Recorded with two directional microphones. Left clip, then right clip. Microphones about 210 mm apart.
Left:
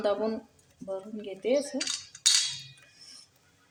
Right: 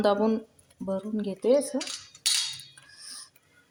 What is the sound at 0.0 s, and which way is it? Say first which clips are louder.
Speech: right 4 dB; 30° right (ahead or behind).